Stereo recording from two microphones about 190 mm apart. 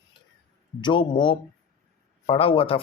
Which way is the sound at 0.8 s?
25° left (ahead or behind).